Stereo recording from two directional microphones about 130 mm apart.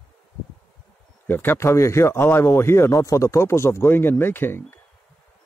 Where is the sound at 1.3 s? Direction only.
15° left (ahead or behind).